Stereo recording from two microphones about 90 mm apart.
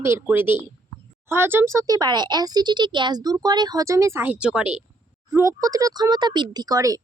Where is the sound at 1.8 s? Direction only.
50° right (ahead or behind).